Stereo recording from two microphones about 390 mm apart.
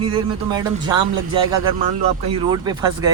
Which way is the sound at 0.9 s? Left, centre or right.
Right.